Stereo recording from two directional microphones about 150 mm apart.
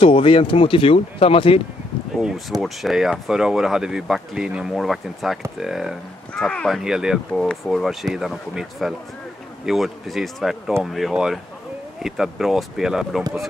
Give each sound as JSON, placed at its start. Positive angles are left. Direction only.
{"t": 0.0, "sound": "speech", "side_deg": 35}
{"t": 2.1, "sound": "speech", "side_deg": 0}